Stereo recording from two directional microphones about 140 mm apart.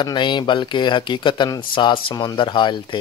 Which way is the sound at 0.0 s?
35° left (ahead or behind).